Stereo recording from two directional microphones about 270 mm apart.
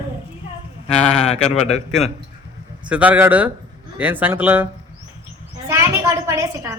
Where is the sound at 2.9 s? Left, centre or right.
Centre.